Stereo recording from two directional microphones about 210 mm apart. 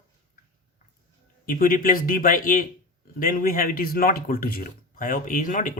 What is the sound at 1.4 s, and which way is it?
A man's voice, 40° left (ahead or behind).